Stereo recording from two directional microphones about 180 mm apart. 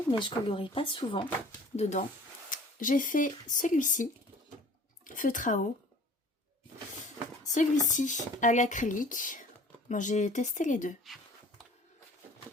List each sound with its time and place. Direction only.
0.1 s speech: 25° left (ahead or behind)
2.5 s speech: 50° left (ahead or behind)
7.4 s speech: 45° left (ahead or behind)
11.0 s a sound: centre (ahead or behind)